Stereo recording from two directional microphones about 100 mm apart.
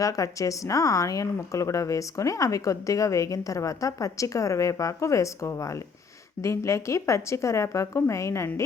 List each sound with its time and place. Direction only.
0.0 s a woman's voice: 35° left (ahead or behind)